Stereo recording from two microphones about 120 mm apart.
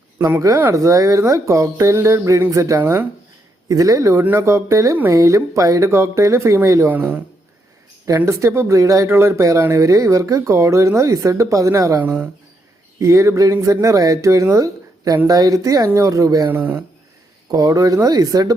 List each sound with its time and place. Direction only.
0.2 s speech: 25° right (ahead or behind)
8.0 s speech: 25° right (ahead or behind)
11.9 s speech: 15° right (ahead or behind)
13.0 s speech: 25° right (ahead or behind)
16.5 s speech: 15° right (ahead or behind)
17.5 s speech: 30° right (ahead or behind)